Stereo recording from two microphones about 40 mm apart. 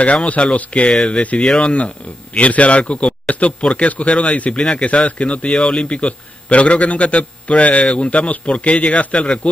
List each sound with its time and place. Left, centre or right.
0.0 s a man's voice: left